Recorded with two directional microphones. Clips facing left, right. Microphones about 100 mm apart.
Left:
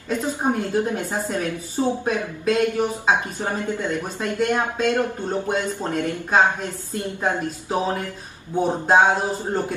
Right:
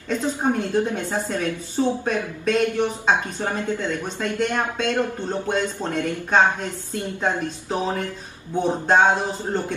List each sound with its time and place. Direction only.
0.1 s speech: 10° left (ahead or behind)